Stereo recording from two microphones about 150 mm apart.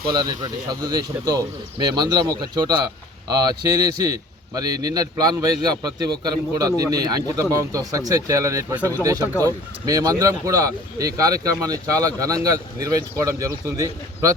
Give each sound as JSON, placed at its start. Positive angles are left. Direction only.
{"t": 0.1, "sound": "speech", "side_deg": -30}
{"t": 9.2, "sound": "speech", "side_deg": 15}
{"t": 9.8, "sound": "speech", "side_deg": -25}